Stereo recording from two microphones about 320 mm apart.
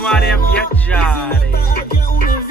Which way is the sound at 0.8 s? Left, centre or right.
Centre.